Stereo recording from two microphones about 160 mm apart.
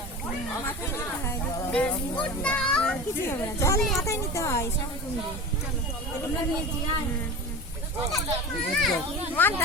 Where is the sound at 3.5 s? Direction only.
20° left (ahead or behind).